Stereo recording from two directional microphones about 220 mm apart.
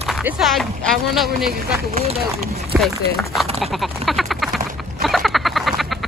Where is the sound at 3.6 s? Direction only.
Centre (ahead or behind).